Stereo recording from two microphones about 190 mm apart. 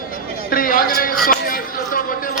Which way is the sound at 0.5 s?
50° left (ahead or behind).